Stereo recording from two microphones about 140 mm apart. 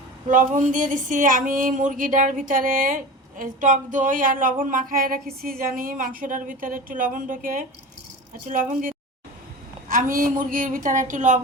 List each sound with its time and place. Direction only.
0.3 s speech: 65° right (ahead or behind)
9.9 s speech: 80° right; by 11.3 s 65° right (ahead or behind)